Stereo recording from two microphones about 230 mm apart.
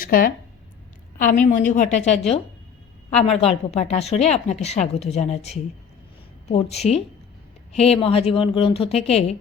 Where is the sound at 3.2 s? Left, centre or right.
Left.